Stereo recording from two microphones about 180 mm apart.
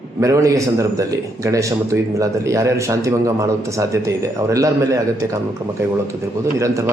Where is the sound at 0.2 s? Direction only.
15° right (ahead or behind).